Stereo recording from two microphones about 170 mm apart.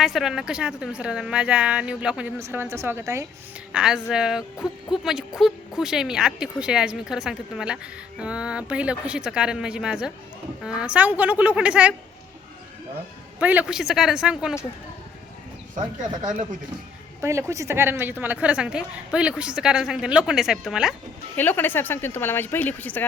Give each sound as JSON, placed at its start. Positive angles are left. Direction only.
{"t": 0.0, "sound": "a woman's voice", "side_deg": 0}
{"t": 3.7, "sound": "a woman's voice", "side_deg": -5}
{"t": 13.4, "sound": "a woman's voice", "side_deg": -10}
{"t": 15.8, "sound": "speech", "side_deg": -50}
{"t": 17.2, "sound": "a woman's voice", "side_deg": -15}
{"t": 21.3, "sound": "speech", "side_deg": 10}